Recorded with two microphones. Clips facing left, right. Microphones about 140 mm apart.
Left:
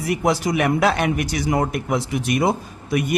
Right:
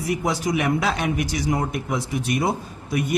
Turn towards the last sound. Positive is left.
turn(degrees=85)